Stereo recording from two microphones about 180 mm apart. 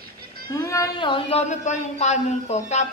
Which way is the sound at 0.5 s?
20° left (ahead or behind).